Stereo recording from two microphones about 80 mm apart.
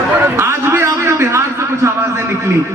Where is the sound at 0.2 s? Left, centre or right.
Right.